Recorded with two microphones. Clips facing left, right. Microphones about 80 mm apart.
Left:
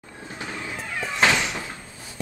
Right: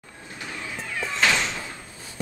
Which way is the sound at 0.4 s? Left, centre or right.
Left.